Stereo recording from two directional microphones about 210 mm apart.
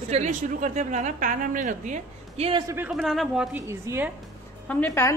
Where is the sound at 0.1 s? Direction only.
35° right (ahead or behind).